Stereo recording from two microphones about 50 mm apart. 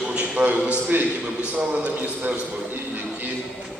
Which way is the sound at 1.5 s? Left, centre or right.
Right.